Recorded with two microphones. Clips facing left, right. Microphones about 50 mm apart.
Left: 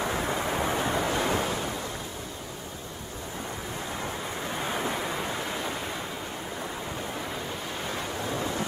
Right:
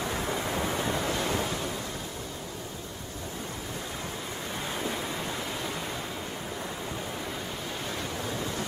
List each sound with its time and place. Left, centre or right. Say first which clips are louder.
0.0 s waves: left 3 dB; centre
4.6 s waves: left 3 dB; centre
8.3 s waves: left 5 dB; centre